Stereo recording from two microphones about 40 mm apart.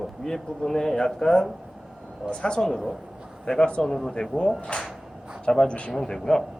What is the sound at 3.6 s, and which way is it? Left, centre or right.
Speech, left.